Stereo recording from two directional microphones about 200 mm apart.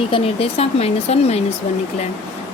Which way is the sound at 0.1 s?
30° left (ahead or behind).